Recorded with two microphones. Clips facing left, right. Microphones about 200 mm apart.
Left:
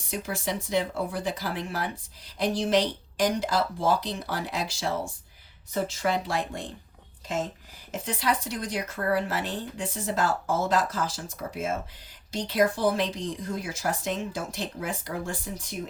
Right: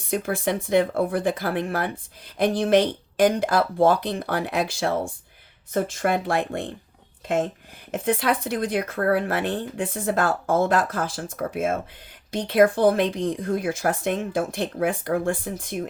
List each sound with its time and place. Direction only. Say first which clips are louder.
0.1 s speech: right 7 dB; 55° right (ahead or behind)
7.9 s speech: right 6 dB; 55° right (ahead or behind)